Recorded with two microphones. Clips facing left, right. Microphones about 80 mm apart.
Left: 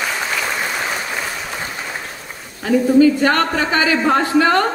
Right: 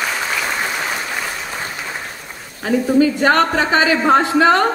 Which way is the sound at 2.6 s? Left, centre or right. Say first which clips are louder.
Left 3 dB; right.